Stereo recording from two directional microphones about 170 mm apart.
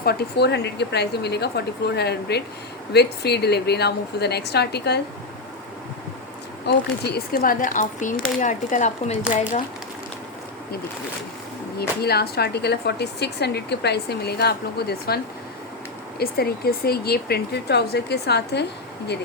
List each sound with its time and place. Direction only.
0.0 s speech: 70° left (ahead or behind)
6.7 s speech: 70° left (ahead or behind); by 9.1 s 45° left (ahead or behind)
11.8 s speech: 70° left (ahead or behind)